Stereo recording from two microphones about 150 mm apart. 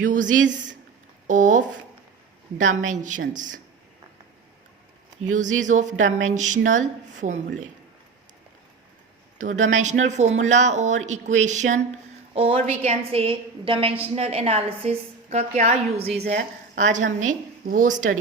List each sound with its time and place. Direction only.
0.0 s speech: 60° right (ahead or behind)
2.8 s speech: 60° right (ahead or behind)
5.3 s speech: 55° right (ahead or behind)
9.4 s a woman's voice: 55° right (ahead or behind)
12.3 s a woman's voice: 40° right (ahead or behind)
16.7 s speech: 55° right (ahead or behind)